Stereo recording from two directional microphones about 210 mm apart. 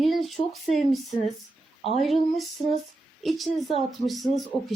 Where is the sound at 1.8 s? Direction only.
30° left (ahead or behind).